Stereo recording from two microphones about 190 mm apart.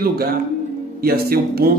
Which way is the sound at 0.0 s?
50° right (ahead or behind).